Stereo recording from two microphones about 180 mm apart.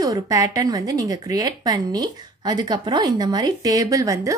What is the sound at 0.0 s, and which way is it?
Speech, 20° right (ahead or behind).